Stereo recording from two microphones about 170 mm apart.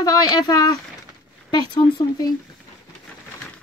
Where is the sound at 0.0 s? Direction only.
20° left (ahead or behind).